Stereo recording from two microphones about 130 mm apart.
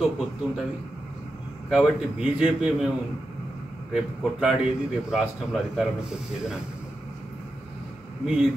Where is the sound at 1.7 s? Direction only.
5° right (ahead or behind).